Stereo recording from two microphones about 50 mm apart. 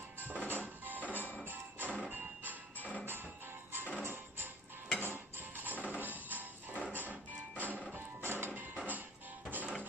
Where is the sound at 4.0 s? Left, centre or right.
Right.